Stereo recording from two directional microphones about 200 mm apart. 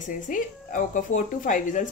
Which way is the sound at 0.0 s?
40° left (ahead or behind).